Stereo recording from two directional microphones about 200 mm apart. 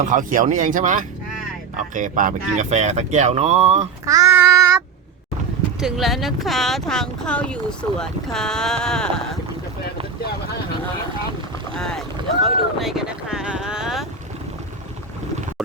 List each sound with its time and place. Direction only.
0.0 s speech: 40° right (ahead or behind)
4.0 s speech: 15° right (ahead or behind)
5.8 s speech: centre (ahead or behind)
11.8 s boat: centre (ahead or behind)